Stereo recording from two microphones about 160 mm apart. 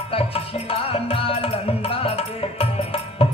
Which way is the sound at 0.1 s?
35° left (ahead or behind).